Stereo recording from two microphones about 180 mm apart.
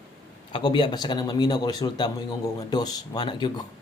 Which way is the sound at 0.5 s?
25° left (ahead or behind).